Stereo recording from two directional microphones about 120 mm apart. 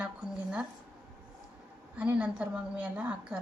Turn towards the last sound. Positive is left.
turn(degrees=-10)  # may be behind; listen again after turning